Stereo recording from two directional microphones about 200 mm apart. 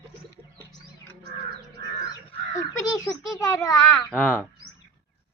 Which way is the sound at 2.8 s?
20° left (ahead or behind).